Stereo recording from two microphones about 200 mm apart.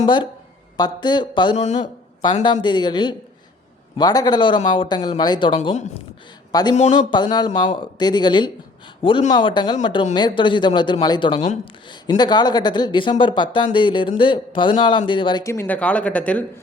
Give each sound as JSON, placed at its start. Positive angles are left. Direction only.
{"t": 0.0, "sound": "speech", "side_deg": 25}
{"t": 2.4, "sound": "a man's voice", "side_deg": 25}